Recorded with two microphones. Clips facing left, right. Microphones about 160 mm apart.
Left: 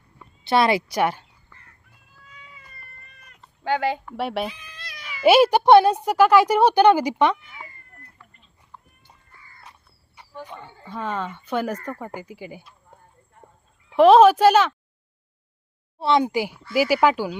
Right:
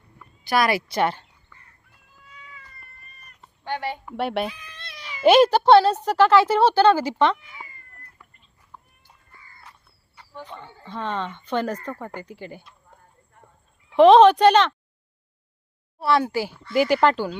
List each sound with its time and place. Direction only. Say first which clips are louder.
0.2 s a woman's voice: left 2 dB; 25° left (ahead or behind)
3.1 s cat: even; 90° left
3.6 s speech: left 6 dB; 90° left
4.0 s speech: right 1 dB; centre (ahead or behind)
4.8 s cat: even; 25° right (ahead or behind)
5.2 s speech: even; 10° left (ahead or behind)
8.7 s horse: even; 10° right (ahead or behind)
10.2 s speech: left 1 dB; 15° left (ahead or behind)
13.9 s speech: even; centre (ahead or behind)
16.0 s speech: left 1 dB; 20° left (ahead or behind)
16.6 s speech: even; 5° left (ahead or behind)